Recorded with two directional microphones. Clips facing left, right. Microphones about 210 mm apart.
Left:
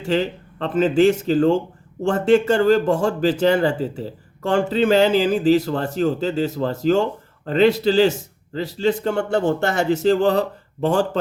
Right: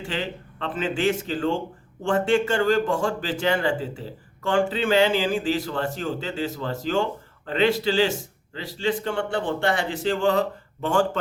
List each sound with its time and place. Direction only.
0.0 s a man's voice: 40° left (ahead or behind)